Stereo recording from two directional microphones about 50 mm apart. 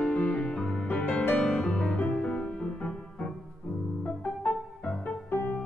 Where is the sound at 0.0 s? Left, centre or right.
Left.